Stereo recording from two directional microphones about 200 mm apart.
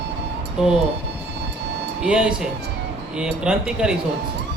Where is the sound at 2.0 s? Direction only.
5° right (ahead or behind).